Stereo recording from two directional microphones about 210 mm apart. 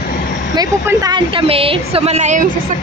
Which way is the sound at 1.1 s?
25° right (ahead or behind).